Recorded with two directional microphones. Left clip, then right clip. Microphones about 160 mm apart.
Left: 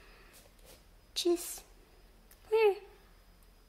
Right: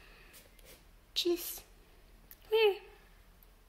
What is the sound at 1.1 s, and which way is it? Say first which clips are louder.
A woman's voice: left 1 dB; 10° left (ahead or behind).